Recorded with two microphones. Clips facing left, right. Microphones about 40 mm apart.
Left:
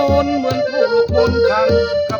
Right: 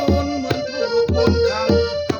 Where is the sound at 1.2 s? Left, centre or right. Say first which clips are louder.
Left 4 dB; centre.